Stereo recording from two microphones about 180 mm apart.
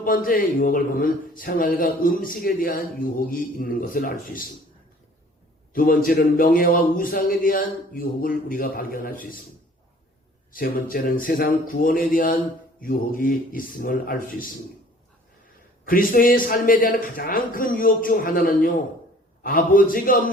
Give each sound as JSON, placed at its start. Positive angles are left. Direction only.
{"t": 0.0, "sound": "a man's voice", "side_deg": 50}
{"t": 5.7, "sound": "a man's voice", "side_deg": 50}
{"t": 10.5, "sound": "a man's voice", "side_deg": 50}
{"t": 15.9, "sound": "a man's voice", "side_deg": 50}